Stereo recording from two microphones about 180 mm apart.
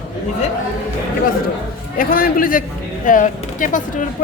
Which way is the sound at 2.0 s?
50° left (ahead or behind).